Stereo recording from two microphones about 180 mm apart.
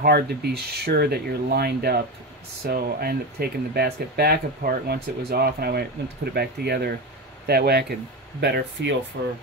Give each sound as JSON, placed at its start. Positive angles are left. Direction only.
{"t": 0.0, "sound": "speech", "side_deg": -60}
{"t": 9.1, "sound": "speech", "side_deg": -60}